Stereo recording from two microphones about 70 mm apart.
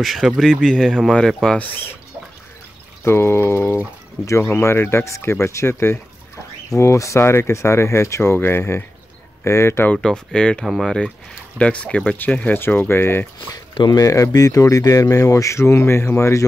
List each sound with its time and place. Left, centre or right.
0.0 s speech: centre
1.6 s speech: left
3.0 s speech: left
9.9 s speech: centre
10.6 s speech: centre
11.5 s speech: centre; by 13.3 s left
13.5 s speech: left